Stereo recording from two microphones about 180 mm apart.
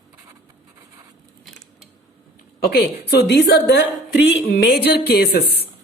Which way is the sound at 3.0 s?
65° left (ahead or behind).